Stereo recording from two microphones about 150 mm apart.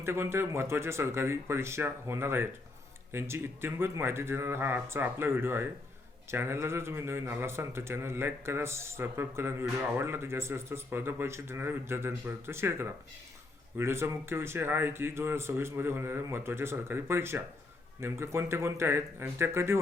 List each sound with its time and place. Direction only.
0.0 s speech: 15° right (ahead or behind)